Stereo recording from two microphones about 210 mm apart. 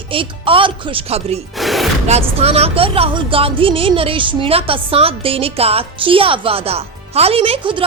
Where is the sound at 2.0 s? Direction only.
30° right (ahead or behind).